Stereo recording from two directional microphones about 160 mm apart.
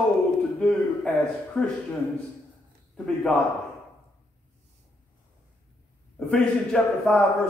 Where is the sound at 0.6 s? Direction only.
5° left (ahead or behind).